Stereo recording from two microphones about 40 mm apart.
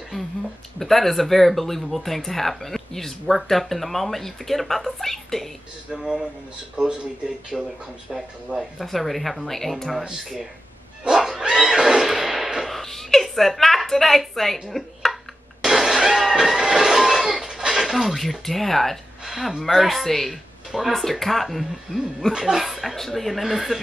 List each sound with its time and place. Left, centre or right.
0.7 s speech: centre
5.9 s speech: centre
6.8 s speech: right
7.5 s speech: centre
8.7 s speech: centre
11.1 s a sound: centre
12.6 s a woman's voice: centre
15.6 s a sound: centre
19.6 s speech: centre
21.9 s speech: right
22.5 s speech: centre